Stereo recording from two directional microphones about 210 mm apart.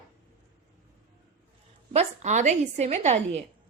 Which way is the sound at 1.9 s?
35° right (ahead or behind).